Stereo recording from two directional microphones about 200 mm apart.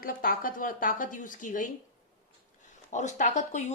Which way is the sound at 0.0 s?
45° left (ahead or behind).